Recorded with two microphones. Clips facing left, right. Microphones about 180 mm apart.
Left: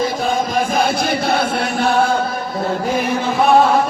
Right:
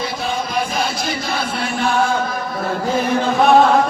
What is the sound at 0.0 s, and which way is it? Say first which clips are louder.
Chant: left 5 dB; 45° left (ahead or behind).